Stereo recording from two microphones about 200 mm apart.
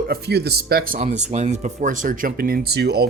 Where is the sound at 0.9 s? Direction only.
35° right (ahead or behind).